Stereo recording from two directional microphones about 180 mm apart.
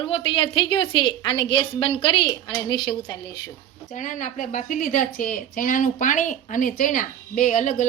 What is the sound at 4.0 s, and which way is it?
A woman's voice, 45° left (ahead or behind).